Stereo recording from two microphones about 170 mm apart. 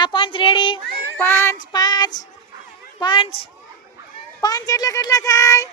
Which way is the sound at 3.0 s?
30° left (ahead or behind).